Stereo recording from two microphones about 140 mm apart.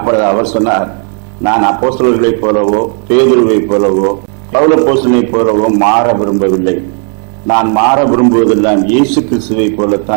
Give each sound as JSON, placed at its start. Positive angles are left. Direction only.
{"t": 0.0, "sound": "a man's voice", "side_deg": -20}